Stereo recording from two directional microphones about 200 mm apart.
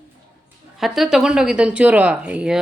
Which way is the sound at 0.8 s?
Centre (ahead or behind).